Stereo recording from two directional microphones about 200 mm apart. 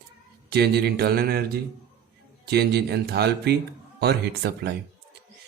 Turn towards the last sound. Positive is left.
turn(degrees=-55)  # may be behind; listen again after turning